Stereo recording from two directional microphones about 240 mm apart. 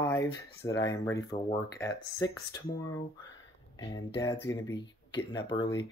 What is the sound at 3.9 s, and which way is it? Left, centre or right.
Speech, centre.